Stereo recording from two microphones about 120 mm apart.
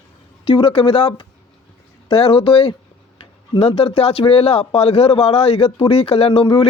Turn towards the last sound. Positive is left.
turn(degrees=50)  # may be behind; listen again after turning